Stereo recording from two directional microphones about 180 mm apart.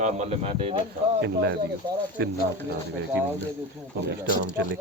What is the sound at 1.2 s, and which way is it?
Speech, 75° right (ahead or behind).